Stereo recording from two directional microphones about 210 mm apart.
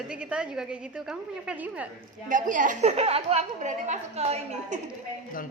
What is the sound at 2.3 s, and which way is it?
A woman's voice, 40° right (ahead or behind).